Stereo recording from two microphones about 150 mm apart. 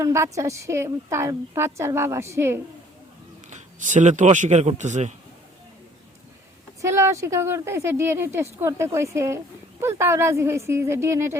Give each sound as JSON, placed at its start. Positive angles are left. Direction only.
{"t": 0.0, "sound": "a woman's voice", "side_deg": -20}
{"t": 3.5, "sound": "speech", "side_deg": -55}
{"t": 6.8, "sound": "speech", "side_deg": -20}